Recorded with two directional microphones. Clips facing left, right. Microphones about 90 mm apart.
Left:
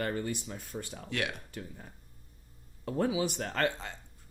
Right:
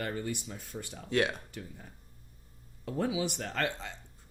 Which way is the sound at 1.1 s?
30° right (ahead or behind).